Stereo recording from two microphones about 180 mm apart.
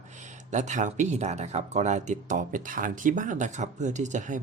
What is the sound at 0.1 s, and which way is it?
Speech, 40° right (ahead or behind).